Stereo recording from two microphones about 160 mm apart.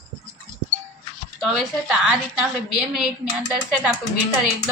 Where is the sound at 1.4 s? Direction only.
Centre (ahead or behind).